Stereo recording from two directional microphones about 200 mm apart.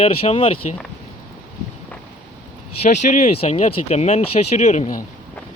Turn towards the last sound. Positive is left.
turn(degrees=40)  # may be behind; listen again after turning